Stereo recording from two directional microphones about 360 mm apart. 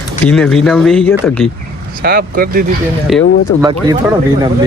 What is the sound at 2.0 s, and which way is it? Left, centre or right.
Speech, right.